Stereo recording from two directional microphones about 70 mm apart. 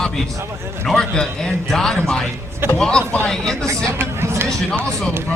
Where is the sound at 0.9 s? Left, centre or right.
Centre.